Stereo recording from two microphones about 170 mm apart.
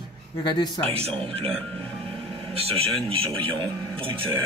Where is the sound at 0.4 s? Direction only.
25° left (ahead or behind).